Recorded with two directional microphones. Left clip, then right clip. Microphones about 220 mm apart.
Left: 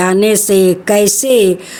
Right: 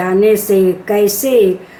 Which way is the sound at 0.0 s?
50° left (ahead or behind).